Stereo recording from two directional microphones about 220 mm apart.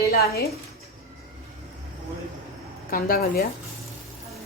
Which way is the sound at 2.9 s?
40° left (ahead or behind).